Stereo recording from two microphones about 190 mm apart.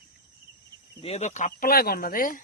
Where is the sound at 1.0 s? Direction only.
35° left (ahead or behind).